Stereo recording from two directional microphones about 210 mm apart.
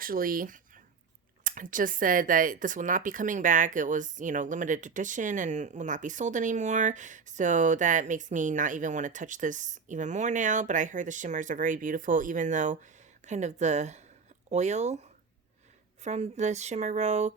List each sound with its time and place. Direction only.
0.0 s speech: 40° right (ahead or behind)